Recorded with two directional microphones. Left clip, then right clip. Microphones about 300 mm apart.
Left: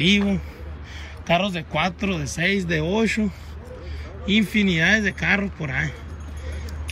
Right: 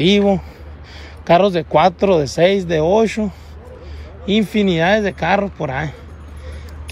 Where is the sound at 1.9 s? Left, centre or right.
Centre.